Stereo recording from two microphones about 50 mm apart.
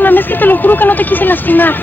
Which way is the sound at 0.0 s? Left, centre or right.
Left.